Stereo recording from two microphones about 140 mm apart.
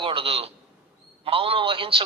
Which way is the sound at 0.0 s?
40° right (ahead or behind).